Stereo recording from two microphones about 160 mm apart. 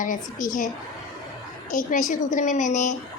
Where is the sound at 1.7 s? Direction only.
55° left (ahead or behind).